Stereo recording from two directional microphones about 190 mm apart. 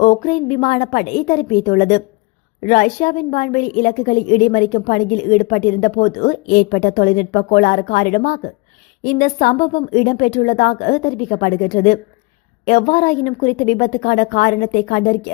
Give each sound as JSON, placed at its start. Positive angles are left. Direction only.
{"t": 0.0, "sound": "a woman's voice", "side_deg": 40}